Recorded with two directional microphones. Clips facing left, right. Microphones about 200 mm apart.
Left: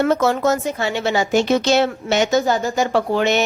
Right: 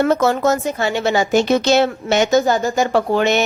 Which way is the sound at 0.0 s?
45° right (ahead or behind).